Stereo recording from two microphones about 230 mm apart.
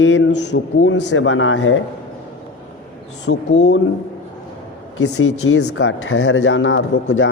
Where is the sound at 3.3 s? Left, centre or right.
Left.